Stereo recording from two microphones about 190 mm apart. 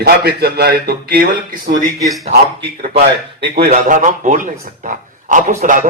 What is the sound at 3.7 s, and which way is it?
A man's voice, 40° right (ahead or behind).